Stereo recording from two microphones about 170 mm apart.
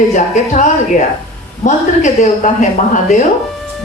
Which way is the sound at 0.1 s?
45° left (ahead or behind).